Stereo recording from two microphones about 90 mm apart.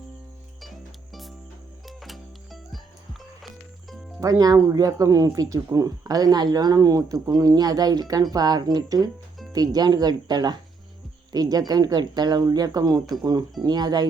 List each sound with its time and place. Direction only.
1.9 s music: centre (ahead or behind)
4.2 s speech: 45° right (ahead or behind)